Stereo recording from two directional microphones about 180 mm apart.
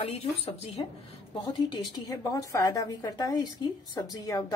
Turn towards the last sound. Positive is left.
turn(degrees=20)  # may be behind; listen again after turning